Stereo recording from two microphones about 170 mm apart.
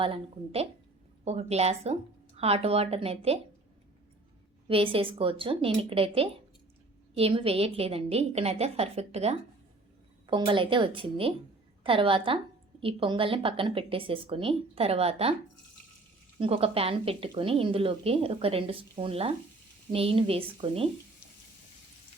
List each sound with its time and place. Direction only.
0.0 s a woman's voice: 35° right (ahead or behind)
4.7 s a woman's voice: 30° right (ahead or behind)
16.4 s a woman's voice: 35° right (ahead or behind)